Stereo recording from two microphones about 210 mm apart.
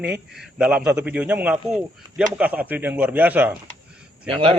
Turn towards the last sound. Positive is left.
turn(degrees=-25)  # may be behind; listen again after turning